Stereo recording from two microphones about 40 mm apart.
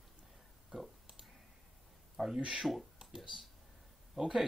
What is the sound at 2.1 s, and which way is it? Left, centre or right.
Speech, centre.